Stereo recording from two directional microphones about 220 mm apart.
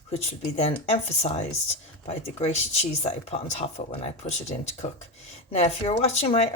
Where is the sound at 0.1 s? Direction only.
30° left (ahead or behind).